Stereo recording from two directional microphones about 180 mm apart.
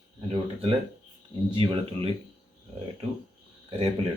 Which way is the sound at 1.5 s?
30° right (ahead or behind).